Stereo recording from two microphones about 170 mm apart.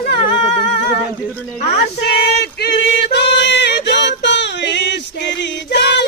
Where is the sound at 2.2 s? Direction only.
75° left (ahead or behind).